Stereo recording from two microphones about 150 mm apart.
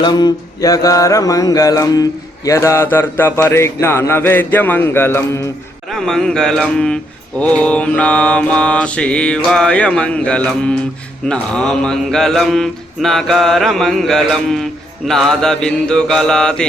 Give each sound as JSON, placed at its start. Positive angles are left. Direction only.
{"t": 0.0, "sound": "mantra", "side_deg": 30}
{"t": 5.9, "sound": "speech", "side_deg": 5}